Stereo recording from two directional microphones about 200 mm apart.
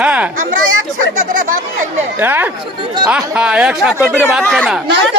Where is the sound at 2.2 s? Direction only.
10° right (ahead or behind); by 4.6 s 5° left (ahead or behind).